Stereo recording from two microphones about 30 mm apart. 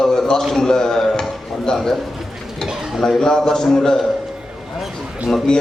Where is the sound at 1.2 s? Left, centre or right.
Centre.